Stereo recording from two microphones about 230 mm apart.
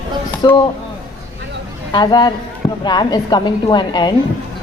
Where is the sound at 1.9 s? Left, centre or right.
Centre.